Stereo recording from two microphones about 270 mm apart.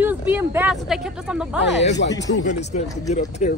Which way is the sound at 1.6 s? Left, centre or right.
Left.